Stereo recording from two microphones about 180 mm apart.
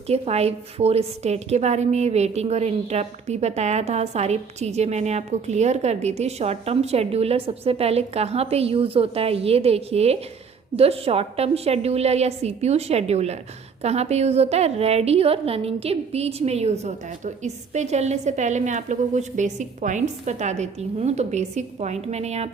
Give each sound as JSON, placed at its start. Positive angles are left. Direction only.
{"t": 0.1, "sound": "a woman's voice", "side_deg": -35}